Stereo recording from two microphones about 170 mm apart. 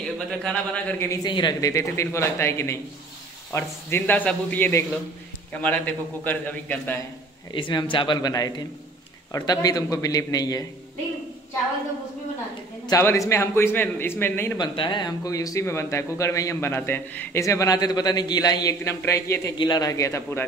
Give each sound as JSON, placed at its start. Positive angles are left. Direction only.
{"t": 0.0, "sound": "speech", "side_deg": 5}
{"t": 7.5, "sound": "a man's voice", "side_deg": 30}
{"t": 12.8, "sound": "speech", "side_deg": 15}
{"t": 14.6, "sound": "speech", "side_deg": 25}